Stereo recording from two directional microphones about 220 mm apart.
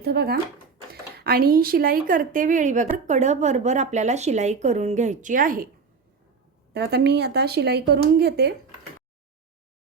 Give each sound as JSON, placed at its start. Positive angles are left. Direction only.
{"t": 0.0, "sound": "speech", "side_deg": -45}
{"t": 6.7, "sound": "speech", "side_deg": -50}